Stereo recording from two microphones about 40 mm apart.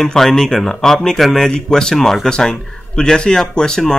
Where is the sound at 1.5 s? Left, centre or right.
Centre.